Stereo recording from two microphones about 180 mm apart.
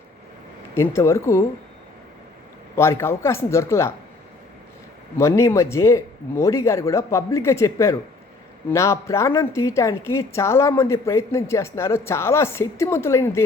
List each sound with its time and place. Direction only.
0.8 s speech: 15° left (ahead or behind)
2.7 s speech: 15° left (ahead or behind)
5.1 s speech: 15° left (ahead or behind)